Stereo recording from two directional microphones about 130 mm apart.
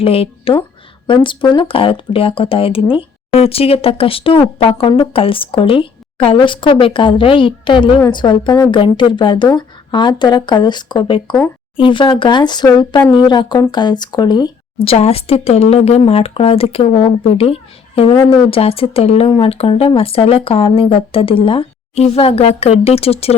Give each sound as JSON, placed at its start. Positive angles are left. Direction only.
{"t": 0.0, "sound": "a woman's voice", "side_deg": 45}